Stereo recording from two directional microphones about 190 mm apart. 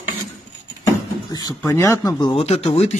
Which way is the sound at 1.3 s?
15° left (ahead or behind).